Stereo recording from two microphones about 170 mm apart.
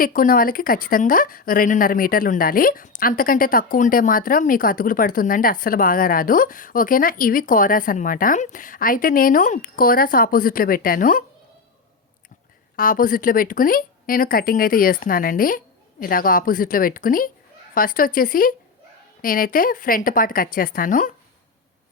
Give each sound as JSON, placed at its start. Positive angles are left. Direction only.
{"t": 0.0, "sound": "speech", "side_deg": 55}
{"t": 12.7, "sound": "speech", "side_deg": 55}